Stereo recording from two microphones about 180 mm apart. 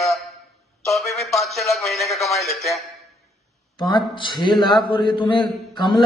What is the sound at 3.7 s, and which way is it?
A man's voice, 25° left (ahead or behind).